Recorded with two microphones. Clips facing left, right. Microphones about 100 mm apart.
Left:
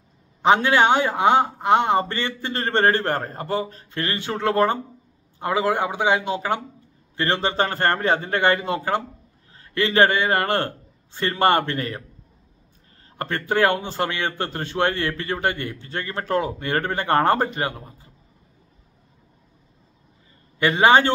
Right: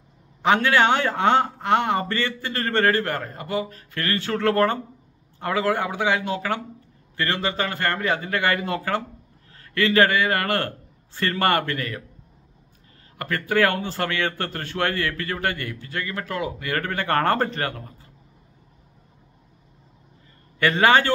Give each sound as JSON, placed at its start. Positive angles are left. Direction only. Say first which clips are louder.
{"t": 0.4, "sound": "a man's voice", "louder": "left 2 dB", "side_deg": 20}
{"t": 13.2, "sound": "a man's voice", "louder": "left 1 dB", "side_deg": 25}
{"t": 20.5, "sound": "a man's voice", "louder": "left 2 dB", "side_deg": 20}